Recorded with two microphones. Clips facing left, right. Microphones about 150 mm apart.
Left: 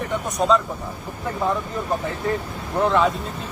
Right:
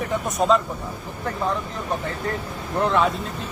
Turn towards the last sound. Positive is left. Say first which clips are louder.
# left 2 dB
turn(degrees=0)  # may be behind; listen again after turning